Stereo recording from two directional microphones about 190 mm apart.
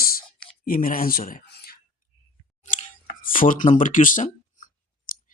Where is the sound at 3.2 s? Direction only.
45° left (ahead or behind).